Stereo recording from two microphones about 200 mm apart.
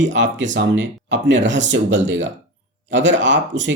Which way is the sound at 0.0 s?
65° right (ahead or behind).